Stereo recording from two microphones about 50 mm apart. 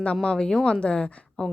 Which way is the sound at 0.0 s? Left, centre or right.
Centre.